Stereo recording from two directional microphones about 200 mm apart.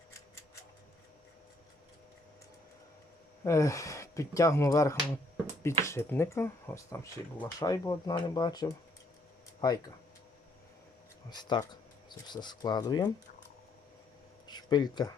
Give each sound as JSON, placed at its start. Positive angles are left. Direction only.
{"t": 3.4, "sound": "speech", "side_deg": 15}
{"t": 11.3, "sound": "speech", "side_deg": 20}
{"t": 14.4, "sound": "a sound", "side_deg": 20}